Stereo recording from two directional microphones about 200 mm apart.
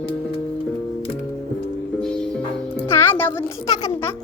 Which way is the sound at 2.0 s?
5° left (ahead or behind).